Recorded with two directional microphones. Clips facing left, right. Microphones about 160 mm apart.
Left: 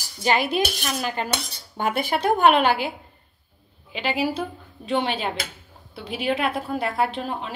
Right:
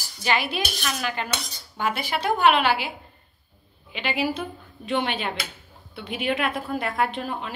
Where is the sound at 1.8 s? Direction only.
50° left (ahead or behind).